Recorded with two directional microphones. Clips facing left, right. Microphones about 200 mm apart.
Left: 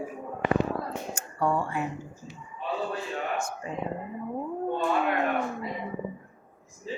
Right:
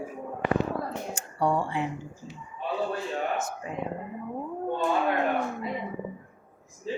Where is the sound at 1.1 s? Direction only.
15° right (ahead or behind).